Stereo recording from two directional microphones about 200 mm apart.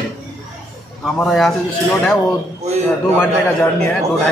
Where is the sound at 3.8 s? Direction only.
10° left (ahead or behind).